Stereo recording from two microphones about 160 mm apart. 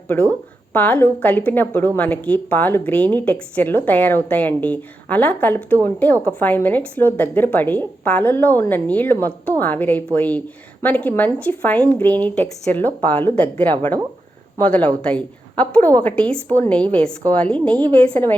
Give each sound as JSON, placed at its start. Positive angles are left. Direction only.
{"t": 0.7, "sound": "a woman's voice", "side_deg": 10}